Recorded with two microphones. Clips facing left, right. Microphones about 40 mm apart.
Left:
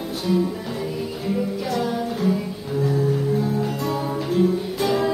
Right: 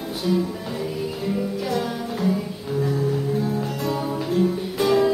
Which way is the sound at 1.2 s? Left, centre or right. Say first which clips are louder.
Left 2 dB; centre.